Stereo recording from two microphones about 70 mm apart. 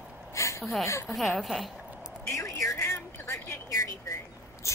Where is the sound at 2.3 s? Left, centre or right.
Left.